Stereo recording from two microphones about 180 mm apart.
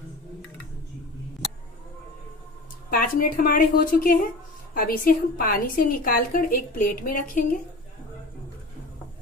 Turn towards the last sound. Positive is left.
turn(degrees=50)  # may be behind; listen again after turning